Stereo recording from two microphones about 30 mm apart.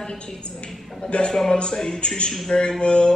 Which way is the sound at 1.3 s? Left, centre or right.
Left.